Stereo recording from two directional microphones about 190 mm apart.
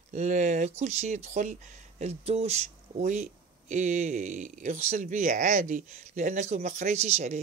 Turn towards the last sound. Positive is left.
turn(degrees=-35)  # may be behind; listen again after turning